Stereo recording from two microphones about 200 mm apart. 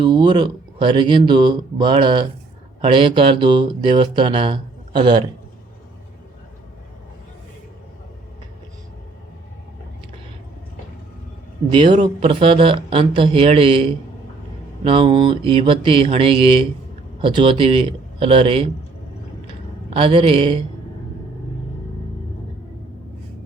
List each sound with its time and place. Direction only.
0.0 s speech: 20° right (ahead or behind)
11.7 s speech: 25° right (ahead or behind)
14.8 s speech: 25° right (ahead or behind)
19.9 s speech: 25° right (ahead or behind)